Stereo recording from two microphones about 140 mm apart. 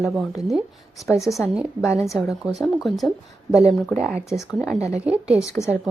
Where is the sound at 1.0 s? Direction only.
20° left (ahead or behind).